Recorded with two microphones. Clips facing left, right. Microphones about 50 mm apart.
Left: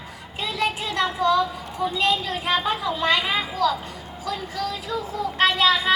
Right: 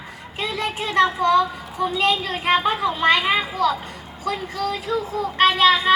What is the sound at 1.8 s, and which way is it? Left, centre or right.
A woman's voice, right.